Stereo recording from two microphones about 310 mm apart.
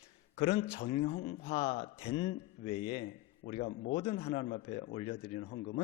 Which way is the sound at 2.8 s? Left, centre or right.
Centre.